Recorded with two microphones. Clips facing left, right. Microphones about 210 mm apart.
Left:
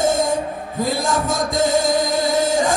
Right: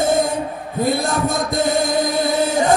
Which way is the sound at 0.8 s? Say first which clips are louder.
Right 2 dB; 60° right (ahead or behind).